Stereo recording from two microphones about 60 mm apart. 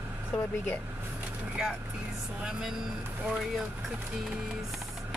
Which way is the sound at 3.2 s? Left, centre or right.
Centre.